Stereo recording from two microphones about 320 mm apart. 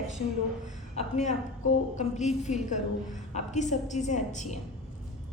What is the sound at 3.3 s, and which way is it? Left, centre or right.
A woman's voice, left.